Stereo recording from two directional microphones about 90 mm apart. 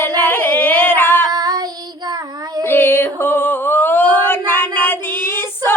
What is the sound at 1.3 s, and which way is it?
Child singing, 50° right (ahead or behind).